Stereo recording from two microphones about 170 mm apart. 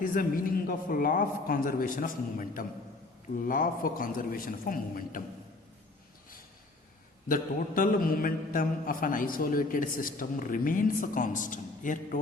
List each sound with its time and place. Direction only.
0.0 s a man's voice: 55° left (ahead or behind)
7.3 s a man's voice: 55° left (ahead or behind)